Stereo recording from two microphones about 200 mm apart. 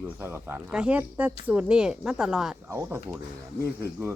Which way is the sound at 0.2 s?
10° right (ahead or behind).